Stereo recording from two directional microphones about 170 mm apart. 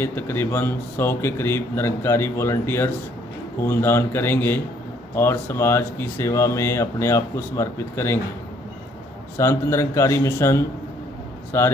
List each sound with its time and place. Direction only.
0.0 s speech: 15° left (ahead or behind)
9.4 s speech: 15° left (ahead or behind)